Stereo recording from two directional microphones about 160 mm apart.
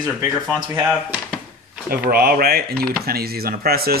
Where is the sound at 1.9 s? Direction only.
70° right (ahead or behind).